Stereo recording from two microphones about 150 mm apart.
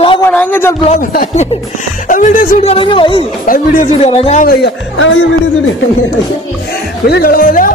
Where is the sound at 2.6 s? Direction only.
40° left (ahead or behind).